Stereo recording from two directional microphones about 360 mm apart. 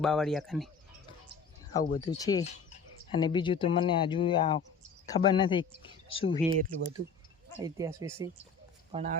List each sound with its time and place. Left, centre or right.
0.0 s speech: centre
1.9 s speech: centre
6.3 s speech: centre